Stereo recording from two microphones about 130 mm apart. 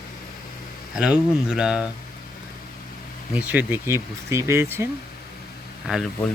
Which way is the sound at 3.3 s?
10° right (ahead or behind).